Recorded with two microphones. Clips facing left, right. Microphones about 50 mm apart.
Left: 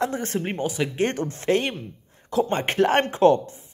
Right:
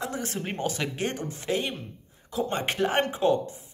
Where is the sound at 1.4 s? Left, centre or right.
Left.